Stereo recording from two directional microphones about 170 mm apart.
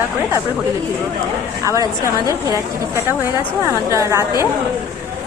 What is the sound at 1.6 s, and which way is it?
A woman's voice, 20° right (ahead or behind).